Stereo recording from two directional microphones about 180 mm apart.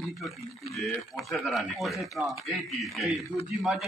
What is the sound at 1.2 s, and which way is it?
A man's voice, centre (ahead or behind).